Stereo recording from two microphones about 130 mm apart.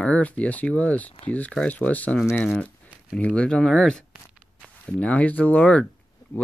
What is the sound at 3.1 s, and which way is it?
Speech, 10° left (ahead or behind).